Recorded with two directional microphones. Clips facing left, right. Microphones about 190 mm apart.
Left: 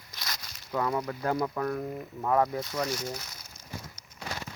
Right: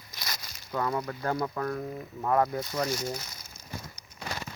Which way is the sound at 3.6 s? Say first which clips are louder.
Right 1 dB; 25° left (ahead or behind).